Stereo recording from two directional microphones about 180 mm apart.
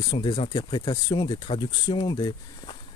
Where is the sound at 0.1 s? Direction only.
25° left (ahead or behind).